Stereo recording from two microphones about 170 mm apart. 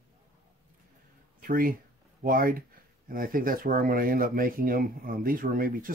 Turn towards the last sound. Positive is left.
turn(degrees=-60)  # may be behind; listen again after turning